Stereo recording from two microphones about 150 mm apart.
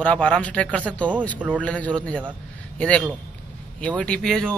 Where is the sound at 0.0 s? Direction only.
10° left (ahead or behind).